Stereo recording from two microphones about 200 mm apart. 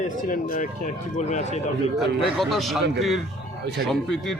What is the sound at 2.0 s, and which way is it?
Speech, centre (ahead or behind).